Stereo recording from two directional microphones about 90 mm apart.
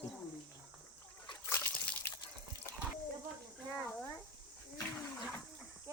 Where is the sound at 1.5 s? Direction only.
25° left (ahead or behind).